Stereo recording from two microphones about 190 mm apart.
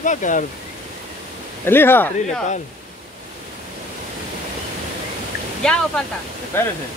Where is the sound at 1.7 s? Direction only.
10° left (ahead or behind).